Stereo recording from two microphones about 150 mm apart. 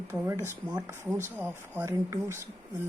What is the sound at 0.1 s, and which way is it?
Speech, 15° right (ahead or behind).